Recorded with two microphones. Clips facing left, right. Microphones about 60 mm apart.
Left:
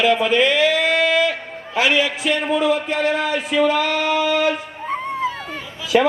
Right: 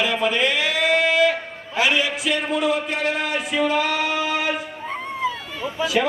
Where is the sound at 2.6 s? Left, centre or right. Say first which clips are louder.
Left 3 dB; left.